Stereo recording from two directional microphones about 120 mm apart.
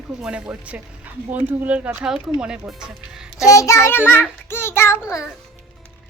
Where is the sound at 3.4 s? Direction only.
25° left (ahead or behind).